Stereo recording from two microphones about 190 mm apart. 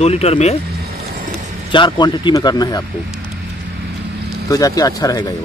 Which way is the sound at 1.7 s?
25° left (ahead or behind).